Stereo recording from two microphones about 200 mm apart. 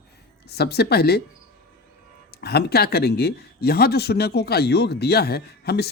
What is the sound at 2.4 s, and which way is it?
Speech, 50° left (ahead or behind).